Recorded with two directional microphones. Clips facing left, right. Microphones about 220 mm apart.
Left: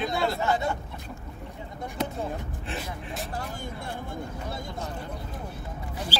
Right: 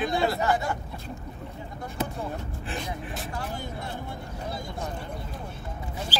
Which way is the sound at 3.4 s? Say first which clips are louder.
Right 1 dB; 50° left (ahead or behind).